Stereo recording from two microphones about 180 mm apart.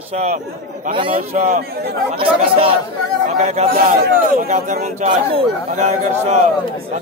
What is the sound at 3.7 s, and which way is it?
A man's voice, 55° right (ahead or behind).